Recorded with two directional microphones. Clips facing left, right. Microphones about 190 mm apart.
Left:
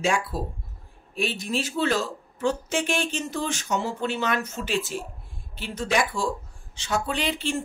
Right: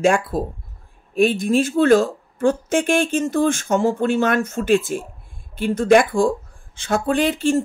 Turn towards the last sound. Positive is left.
turn(degrees=-45)  # may be behind; listen again after turning